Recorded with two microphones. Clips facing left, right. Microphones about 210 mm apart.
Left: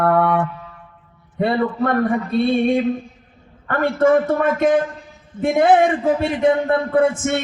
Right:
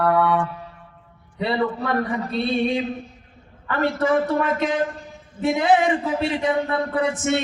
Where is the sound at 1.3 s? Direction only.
50° left (ahead or behind).